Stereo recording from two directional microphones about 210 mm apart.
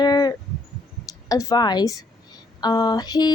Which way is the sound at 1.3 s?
15° left (ahead or behind).